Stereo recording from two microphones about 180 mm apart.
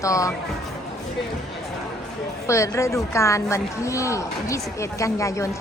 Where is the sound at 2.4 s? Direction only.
15° left (ahead or behind).